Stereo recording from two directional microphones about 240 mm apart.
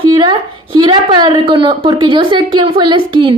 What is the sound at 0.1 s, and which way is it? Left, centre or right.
A woman's voice, centre.